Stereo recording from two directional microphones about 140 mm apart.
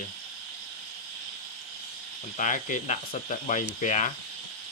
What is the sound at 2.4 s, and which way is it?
Speech, 65° left (ahead or behind).